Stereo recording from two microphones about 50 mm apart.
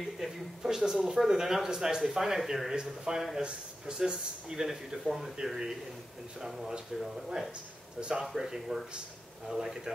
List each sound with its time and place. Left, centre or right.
0.6 s speech: centre
8.0 s speech: centre